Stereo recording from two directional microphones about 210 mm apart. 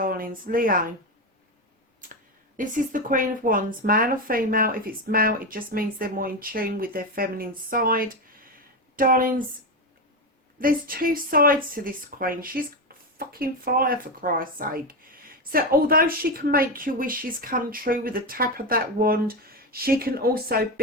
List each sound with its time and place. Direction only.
0.0 s a woman's voice: 40° right (ahead or behind)
2.6 s speech: 40° right (ahead or behind)
10.6 s speech: 45° right (ahead or behind)